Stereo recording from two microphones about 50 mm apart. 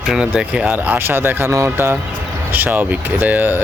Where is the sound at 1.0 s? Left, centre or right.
Right.